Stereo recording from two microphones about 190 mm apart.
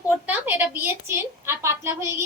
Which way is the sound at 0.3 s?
10° right (ahead or behind).